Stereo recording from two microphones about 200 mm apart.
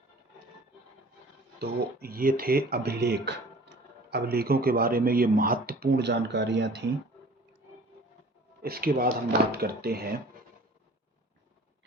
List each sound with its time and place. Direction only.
1.5 s speech: 50° right (ahead or behind)
8.6 s speech: 50° right (ahead or behind)